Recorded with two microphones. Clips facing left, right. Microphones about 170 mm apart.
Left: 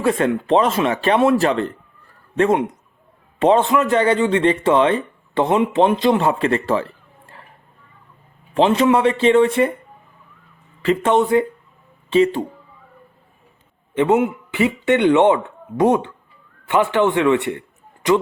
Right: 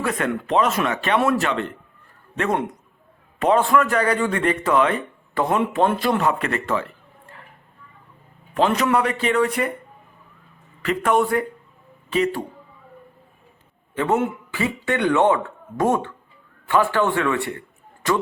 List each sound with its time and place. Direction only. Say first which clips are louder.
0.0 s speech: left 6 dB; 30° left (ahead or behind)
3.3 s speech: left 3 dB; 25° left (ahead or behind)
8.5 s speech: left 4 dB; 25° left (ahead or behind)
10.8 s speech: left 3 dB; 25° left (ahead or behind)
13.9 s a man's voice: left 5 dB; 20° left (ahead or behind)